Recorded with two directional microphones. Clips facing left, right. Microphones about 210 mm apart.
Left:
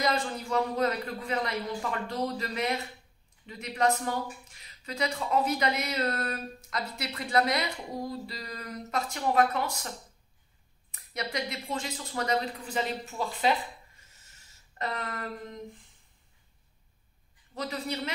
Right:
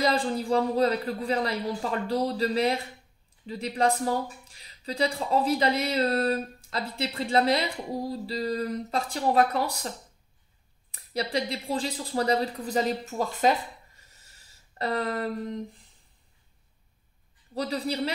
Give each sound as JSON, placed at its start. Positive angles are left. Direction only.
{"t": 0.0, "sound": "speech", "side_deg": -30}
{"t": 11.3, "sound": "speech", "side_deg": -30}
{"t": 14.8, "sound": "speech", "side_deg": -35}
{"t": 17.6, "sound": "speech", "side_deg": -35}